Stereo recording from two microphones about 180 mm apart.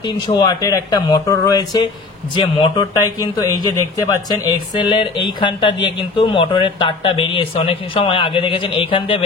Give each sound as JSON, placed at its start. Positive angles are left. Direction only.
{"t": 0.3, "sound": "speech", "side_deg": 20}